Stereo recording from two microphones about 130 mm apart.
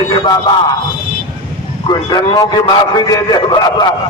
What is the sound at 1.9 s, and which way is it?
A man's voice, 30° left (ahead or behind).